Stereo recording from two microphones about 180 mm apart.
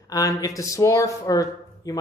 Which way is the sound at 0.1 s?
20° left (ahead or behind).